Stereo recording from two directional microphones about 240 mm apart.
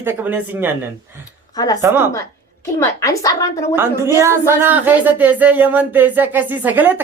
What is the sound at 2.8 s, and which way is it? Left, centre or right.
Speech, centre.